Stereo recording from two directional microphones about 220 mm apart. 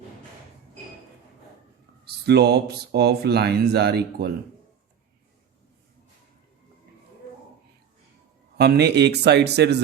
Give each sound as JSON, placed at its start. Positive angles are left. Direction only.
{"t": 2.0, "sound": "speech", "side_deg": -45}
{"t": 8.5, "sound": "speech", "side_deg": -45}